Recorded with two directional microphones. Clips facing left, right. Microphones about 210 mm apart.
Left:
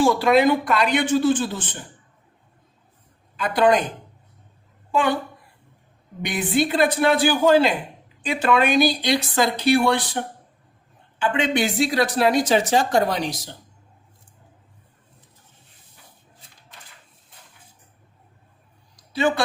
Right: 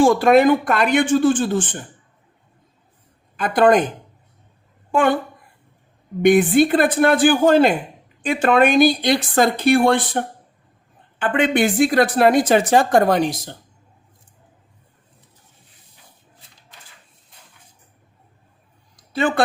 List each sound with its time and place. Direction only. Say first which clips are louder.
0.0 s speech: right 4 dB; 50° right (ahead or behind)
3.3 s speech: right 4 dB; 50° right (ahead or behind)
4.9 s a woman's voice: right 4 dB; 50° right (ahead or behind)
6.2 s speech: right 9 dB; 50° right (ahead or behind)